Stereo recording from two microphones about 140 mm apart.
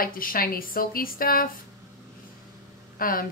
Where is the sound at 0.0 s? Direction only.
90° left.